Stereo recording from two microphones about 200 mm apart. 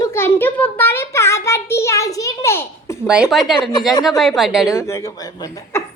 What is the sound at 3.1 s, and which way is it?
Speech, 5° right (ahead or behind).